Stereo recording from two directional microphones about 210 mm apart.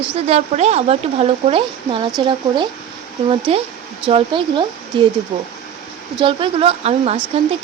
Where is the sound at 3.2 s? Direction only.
25° right (ahead or behind).